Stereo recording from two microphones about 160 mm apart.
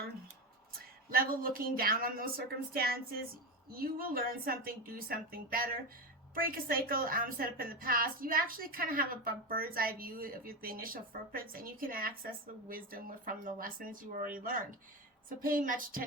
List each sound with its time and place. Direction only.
1.1 s a woman's voice: 60° right (ahead or behind)